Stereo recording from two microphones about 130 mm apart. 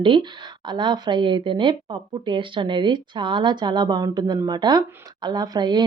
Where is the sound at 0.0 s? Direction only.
40° right (ahead or behind).